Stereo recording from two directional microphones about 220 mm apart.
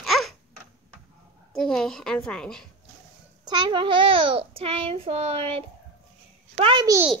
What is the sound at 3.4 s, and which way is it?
Speech, 20° right (ahead or behind).